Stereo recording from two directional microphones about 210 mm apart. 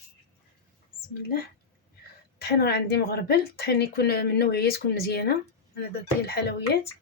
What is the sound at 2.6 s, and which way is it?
A woman's voice, 50° left (ahead or behind).